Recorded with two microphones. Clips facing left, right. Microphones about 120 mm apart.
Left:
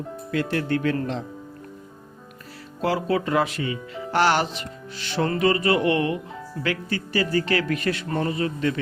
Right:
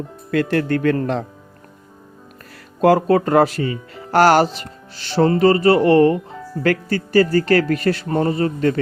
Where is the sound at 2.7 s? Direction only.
50° right (ahead or behind).